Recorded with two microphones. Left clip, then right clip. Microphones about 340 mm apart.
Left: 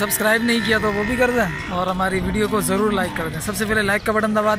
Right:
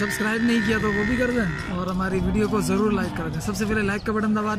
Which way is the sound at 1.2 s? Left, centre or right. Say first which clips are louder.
Left 6 dB; left.